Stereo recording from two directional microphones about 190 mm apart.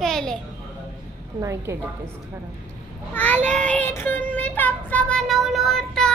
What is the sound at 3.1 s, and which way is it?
Speech, 10° left (ahead or behind).